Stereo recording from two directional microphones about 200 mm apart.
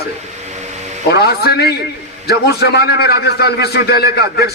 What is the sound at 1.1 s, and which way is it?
A man's voice, 50° left (ahead or behind).